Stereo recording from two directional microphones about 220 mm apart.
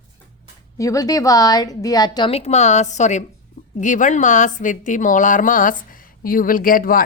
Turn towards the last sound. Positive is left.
turn(degrees=40)  # may be behind; listen again after turning